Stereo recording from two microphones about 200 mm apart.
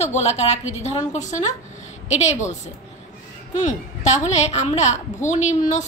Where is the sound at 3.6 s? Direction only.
35° left (ahead or behind).